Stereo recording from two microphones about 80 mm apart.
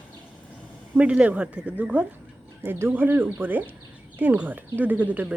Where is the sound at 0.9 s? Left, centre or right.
Centre.